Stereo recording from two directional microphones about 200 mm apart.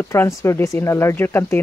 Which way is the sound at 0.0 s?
10° left (ahead or behind).